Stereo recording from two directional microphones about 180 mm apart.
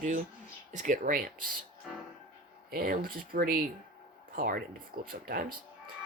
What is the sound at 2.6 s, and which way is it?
Speech, 55° right (ahead or behind).